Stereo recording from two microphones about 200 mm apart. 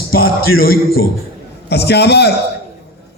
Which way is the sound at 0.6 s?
50° left (ahead or behind).